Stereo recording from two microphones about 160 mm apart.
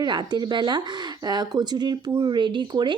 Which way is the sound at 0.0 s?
25° right (ahead or behind).